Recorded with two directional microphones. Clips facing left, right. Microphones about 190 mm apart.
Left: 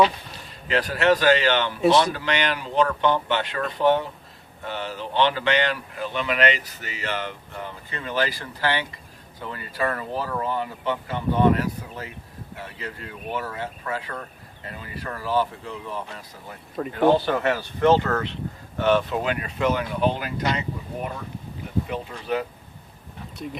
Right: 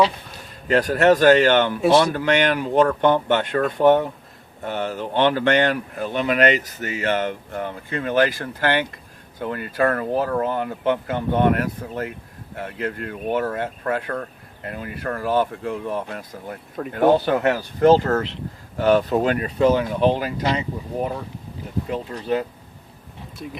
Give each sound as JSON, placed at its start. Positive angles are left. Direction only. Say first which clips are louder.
{"t": 0.7, "sound": "speech", "louder": "right 4 dB", "side_deg": -45}
{"t": 21.8, "sound": "speech", "louder": "right 4 dB", "side_deg": -30}